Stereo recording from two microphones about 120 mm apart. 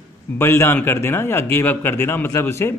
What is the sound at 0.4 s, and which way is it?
Speech, 20° left (ahead or behind).